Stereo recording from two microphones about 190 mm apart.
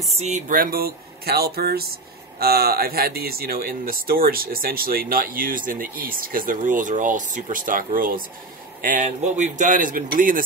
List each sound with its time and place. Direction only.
0.2 s speech: 40° right (ahead or behind)